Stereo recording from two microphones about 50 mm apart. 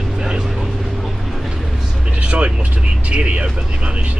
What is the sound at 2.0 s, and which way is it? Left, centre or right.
Speech, right.